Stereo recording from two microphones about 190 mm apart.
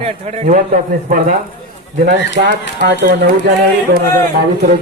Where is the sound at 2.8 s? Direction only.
60° right (ahead or behind).